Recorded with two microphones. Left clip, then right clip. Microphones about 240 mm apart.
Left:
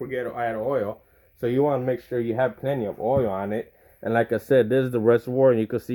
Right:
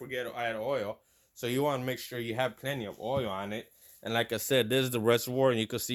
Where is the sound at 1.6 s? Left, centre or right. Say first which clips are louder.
Left 9 dB; right.